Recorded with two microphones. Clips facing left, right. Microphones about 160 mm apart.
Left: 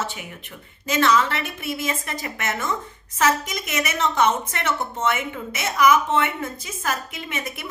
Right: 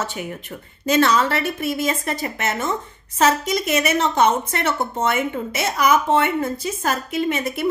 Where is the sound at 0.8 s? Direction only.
35° right (ahead or behind).